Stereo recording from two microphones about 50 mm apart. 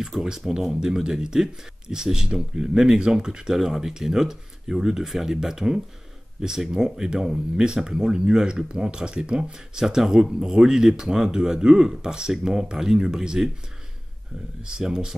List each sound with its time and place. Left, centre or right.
0.1 s speech: centre
14.6 s speech: centre